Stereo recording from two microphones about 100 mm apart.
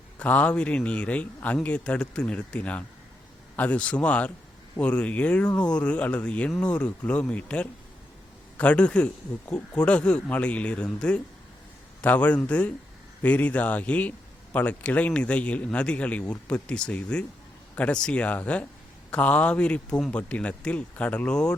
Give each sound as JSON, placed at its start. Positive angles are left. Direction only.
{"t": 0.2, "sound": "a man's voice", "side_deg": 15}